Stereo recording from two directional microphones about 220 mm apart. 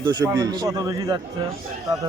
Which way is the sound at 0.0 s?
20° right (ahead or behind).